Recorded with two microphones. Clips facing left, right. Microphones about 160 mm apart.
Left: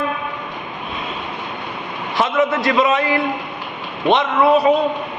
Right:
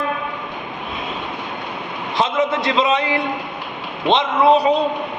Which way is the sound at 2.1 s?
20° right (ahead or behind).